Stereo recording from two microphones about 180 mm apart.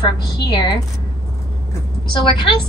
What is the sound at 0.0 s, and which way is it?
Speech, 25° left (ahead or behind).